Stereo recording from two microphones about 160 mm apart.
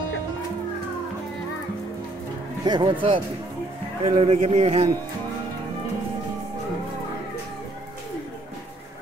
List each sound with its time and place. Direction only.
2.6 s speech: 25° right (ahead or behind)
4.0 s a man's voice: 45° right (ahead or behind)